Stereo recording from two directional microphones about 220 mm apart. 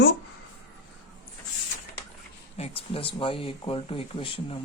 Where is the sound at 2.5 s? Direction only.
25° left (ahead or behind).